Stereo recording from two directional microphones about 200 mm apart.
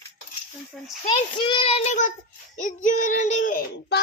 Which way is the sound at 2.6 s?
40° left (ahead or behind).